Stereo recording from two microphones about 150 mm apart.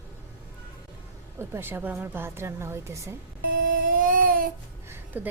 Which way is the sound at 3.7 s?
65° right (ahead or behind).